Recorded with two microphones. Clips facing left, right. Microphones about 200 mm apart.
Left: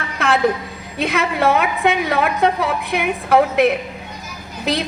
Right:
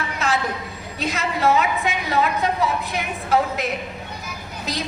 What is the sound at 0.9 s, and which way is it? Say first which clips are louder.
A woman's voice: left 6 dB; 60° left (ahead or behind).